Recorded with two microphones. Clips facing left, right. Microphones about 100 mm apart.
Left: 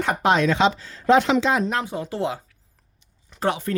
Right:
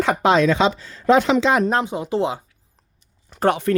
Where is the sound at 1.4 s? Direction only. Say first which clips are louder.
Right 4 dB; 90° right.